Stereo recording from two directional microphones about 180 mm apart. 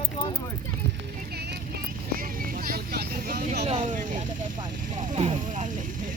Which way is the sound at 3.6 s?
40° right (ahead or behind).